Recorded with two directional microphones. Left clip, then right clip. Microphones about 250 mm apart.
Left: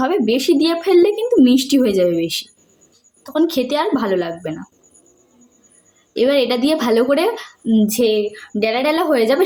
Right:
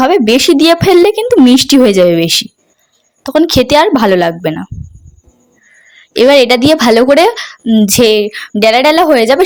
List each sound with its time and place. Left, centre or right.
0.0 s speech: right
6.1 s speech: right